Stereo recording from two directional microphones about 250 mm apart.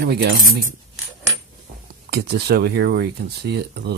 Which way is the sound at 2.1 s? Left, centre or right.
Right.